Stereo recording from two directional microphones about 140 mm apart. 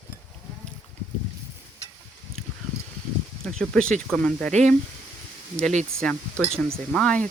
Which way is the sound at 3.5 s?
5° left (ahead or behind).